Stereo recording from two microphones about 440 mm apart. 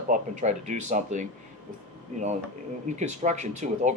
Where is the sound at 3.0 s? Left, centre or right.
Centre.